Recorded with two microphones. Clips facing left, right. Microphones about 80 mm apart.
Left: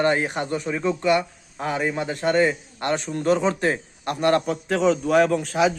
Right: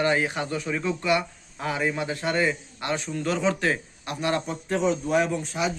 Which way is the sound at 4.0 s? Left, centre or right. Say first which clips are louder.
Left 9 dB; left.